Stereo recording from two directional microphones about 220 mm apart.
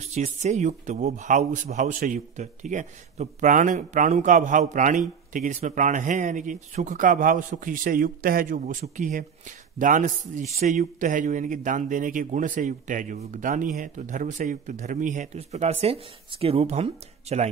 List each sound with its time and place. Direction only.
0.1 s a man's voice: 30° right (ahead or behind)